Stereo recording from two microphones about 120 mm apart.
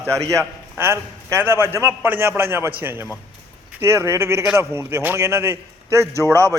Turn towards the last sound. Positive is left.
turn(degrees=-25)  # may be behind; listen again after turning